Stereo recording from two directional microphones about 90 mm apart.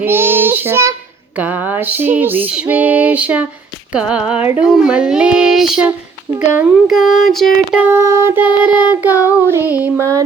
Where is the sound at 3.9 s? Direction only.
10° right (ahead or behind).